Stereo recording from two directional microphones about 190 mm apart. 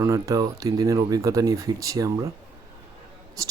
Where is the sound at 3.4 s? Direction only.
15° right (ahead or behind).